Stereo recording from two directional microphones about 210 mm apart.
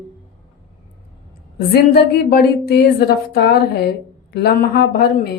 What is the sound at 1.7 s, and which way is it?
A woman's voice, 50° left (ahead or behind).